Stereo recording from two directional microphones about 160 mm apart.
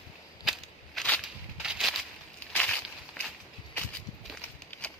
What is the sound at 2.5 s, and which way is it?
Walk, 5° left (ahead or behind).